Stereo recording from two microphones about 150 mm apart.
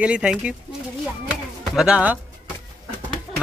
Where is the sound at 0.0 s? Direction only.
5° right (ahead or behind).